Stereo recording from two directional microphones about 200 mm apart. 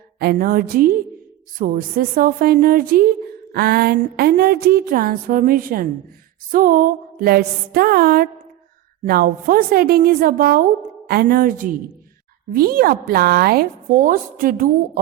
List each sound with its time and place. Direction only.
0.2 s a woman's voice: 50° right (ahead or behind)